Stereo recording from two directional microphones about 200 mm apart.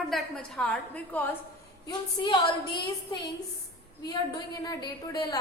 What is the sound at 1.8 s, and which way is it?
A woman's voice, 25° left (ahead or behind).